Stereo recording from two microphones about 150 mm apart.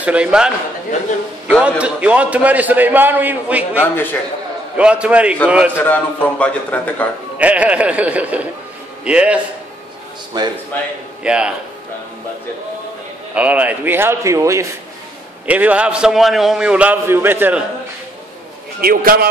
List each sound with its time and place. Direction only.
0.0 s a man's voice: 5° right (ahead or behind)
1.6 s a man's voice: 10° right (ahead or behind)
3.8 s a man's voice: 15° left (ahead or behind)
4.7 s a man's voice: 5° right (ahead or behind)
5.8 s a man's voice: 10° left (ahead or behind)
7.3 s a man's voice: 10° right (ahead or behind)
10.3 s speech: 30° right (ahead or behind)
11.2 s a man's voice: 5° right (ahead or behind)
13.3 s a man's voice: 10° right (ahead or behind)
15.4 s a man's voice: 10° right (ahead or behind)
18.8 s a man's voice: 85° right